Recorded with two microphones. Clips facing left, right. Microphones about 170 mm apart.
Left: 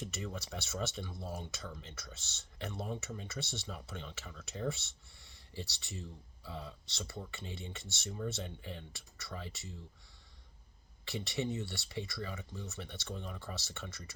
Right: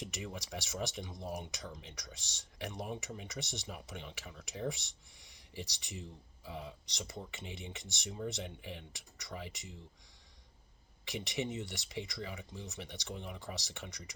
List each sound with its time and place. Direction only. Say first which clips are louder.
0.0 s speech: left 1 dB; 15° right (ahead or behind)
11.0 s speech: left 1 dB; 15° right (ahead or behind)